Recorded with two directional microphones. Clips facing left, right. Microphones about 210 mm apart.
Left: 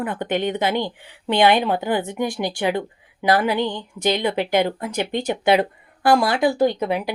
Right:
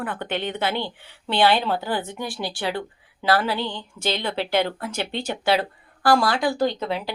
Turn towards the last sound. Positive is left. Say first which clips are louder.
# left 4 dB
turn(degrees=15)  # may be behind; listen again after turning